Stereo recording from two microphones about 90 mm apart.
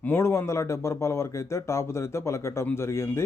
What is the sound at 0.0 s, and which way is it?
Speech, 25° left (ahead or behind).